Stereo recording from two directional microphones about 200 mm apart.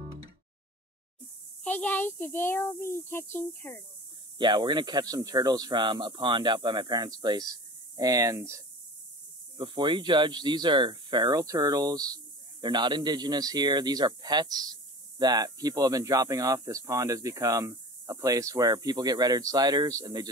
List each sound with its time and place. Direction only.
1.6 s speech: 5° left (ahead or behind)
4.4 s a man's voice: 20° right (ahead or behind)